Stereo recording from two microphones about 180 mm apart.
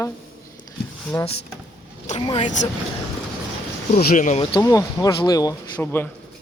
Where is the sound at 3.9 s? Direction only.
45° left (ahead or behind).